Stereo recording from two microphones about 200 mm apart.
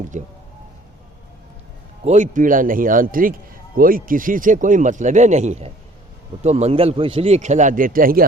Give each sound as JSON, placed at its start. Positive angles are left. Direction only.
{"t": 0.1, "sound": "a man's voice", "side_deg": -35}
{"t": 2.0, "sound": "a man's voice", "side_deg": -40}